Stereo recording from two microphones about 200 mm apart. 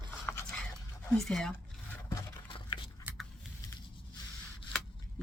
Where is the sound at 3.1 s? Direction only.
10° right (ahead or behind).